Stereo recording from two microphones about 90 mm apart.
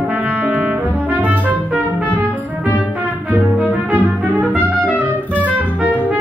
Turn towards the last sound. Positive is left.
turn(degrees=-15)  # may be behind; listen again after turning